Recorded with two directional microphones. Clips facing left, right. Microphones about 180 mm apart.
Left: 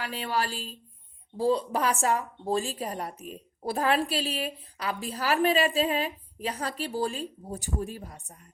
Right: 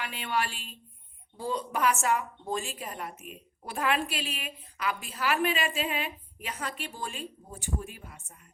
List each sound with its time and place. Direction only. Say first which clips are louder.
0.0 s speech: left 2 dB; 35° left (ahead or behind)